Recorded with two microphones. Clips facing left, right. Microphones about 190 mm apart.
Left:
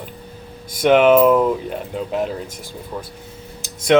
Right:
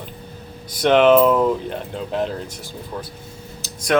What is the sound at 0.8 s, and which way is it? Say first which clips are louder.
Speech: left 1 dB; 10° left (ahead or behind).